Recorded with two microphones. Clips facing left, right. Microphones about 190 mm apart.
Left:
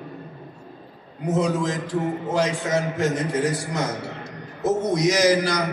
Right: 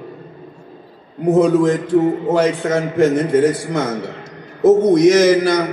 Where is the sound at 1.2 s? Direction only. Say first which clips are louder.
Right 10 dB; 55° right (ahead or behind).